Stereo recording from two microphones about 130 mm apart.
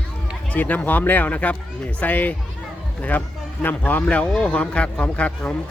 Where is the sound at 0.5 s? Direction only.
10° left (ahead or behind).